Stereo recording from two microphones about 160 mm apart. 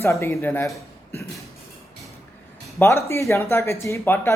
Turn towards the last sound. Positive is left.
turn(degrees=15)  # may be behind; listen again after turning